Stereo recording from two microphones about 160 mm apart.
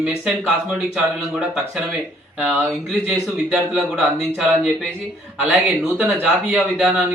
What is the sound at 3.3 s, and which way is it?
Speech, centre (ahead or behind).